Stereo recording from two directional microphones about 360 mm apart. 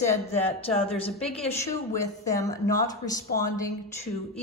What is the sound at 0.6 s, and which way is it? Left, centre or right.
A woman's voice, centre.